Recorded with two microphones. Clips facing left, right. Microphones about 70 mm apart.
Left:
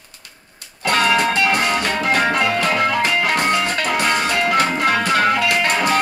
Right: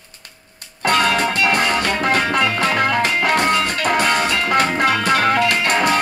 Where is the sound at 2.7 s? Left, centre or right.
Right.